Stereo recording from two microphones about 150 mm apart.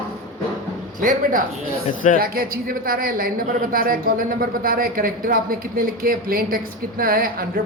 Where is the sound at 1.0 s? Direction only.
65° right (ahead or behind).